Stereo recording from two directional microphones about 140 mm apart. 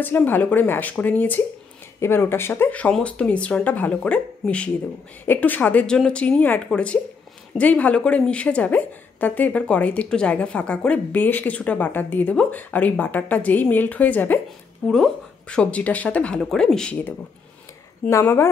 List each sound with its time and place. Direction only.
0.0 s a woman's voice: 15° left (ahead or behind)
18.1 s a woman's voice: 15° left (ahead or behind)